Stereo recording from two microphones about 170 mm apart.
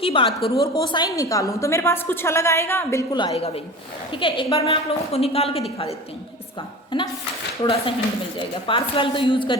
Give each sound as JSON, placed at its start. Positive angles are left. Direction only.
{"t": 0.0, "sound": "a woman's voice", "side_deg": 30}
{"t": 3.1, "sound": "a woman's voice", "side_deg": 25}
{"t": 6.9, "sound": "a woman's voice", "side_deg": 30}